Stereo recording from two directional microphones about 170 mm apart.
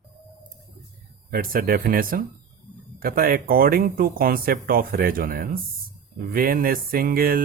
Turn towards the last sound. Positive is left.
turn(degrees=-60)  # may be behind; listen again after turning